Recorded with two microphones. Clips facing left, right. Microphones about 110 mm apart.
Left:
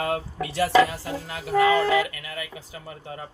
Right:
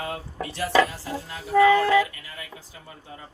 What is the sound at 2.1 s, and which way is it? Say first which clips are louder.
Speech: left 6 dB; 90° left.